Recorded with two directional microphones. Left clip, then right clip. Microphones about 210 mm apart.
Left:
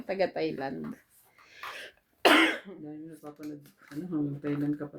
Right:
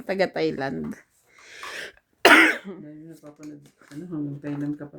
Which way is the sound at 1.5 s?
55° right (ahead or behind).